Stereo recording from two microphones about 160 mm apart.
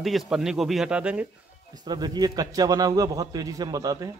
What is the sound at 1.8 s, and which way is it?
A man's voice, 25° right (ahead or behind).